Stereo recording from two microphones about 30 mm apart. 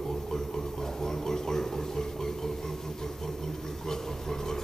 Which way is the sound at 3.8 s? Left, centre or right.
Centre.